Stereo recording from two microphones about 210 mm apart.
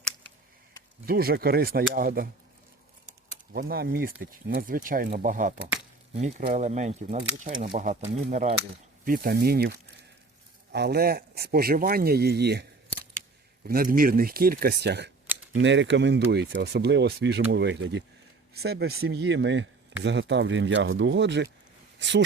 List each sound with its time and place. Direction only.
1.0 s speech: 45° right (ahead or behind)
3.5 s speech: 45° right (ahead or behind)
9.0 s speech: 45° right (ahead or behind)
13.7 s speech: 45° right (ahead or behind)